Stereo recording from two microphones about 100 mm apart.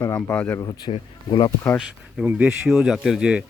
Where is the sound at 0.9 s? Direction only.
70° left (ahead or behind).